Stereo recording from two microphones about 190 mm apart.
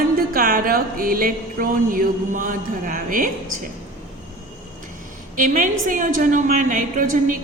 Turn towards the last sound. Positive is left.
turn(degrees=-45)  # may be behind; listen again after turning